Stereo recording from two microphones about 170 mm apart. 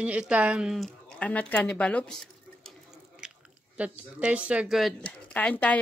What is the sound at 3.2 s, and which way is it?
Chewing, 5° right (ahead or behind).